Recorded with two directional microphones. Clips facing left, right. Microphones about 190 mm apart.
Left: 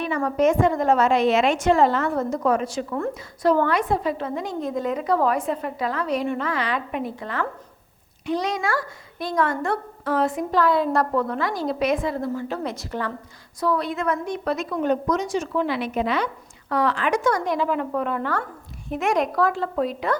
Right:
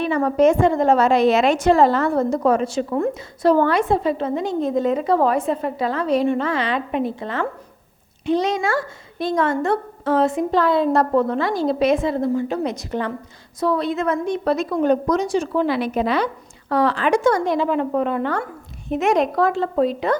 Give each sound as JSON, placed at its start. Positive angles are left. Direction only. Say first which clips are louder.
{"t": 0.0, "sound": "a woman's voice", "louder": "right 4 dB", "side_deg": -30}